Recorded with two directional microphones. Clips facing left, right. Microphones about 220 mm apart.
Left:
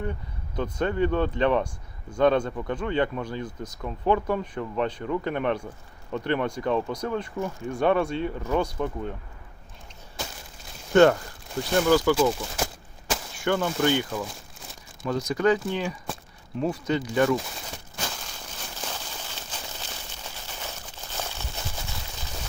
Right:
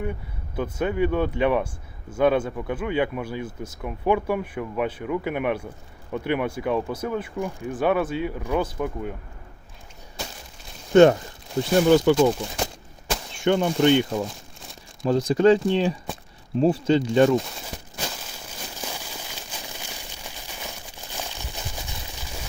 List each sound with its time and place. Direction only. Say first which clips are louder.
0.0 s speech: right 2 dB; 10° right (ahead or behind)
10.9 s speech: right 3 dB; 20° right (ahead or behind)
13.4 s speech: right 5 dB; 20° right (ahead or behind)
18.8 s a sound: right 1 dB; 10° right (ahead or behind)